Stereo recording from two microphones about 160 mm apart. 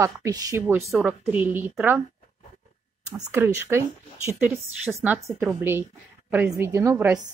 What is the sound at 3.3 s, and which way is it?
A woman's voice, 15° right (ahead or behind).